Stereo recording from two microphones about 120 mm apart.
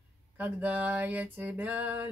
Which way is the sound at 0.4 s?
15° right (ahead or behind).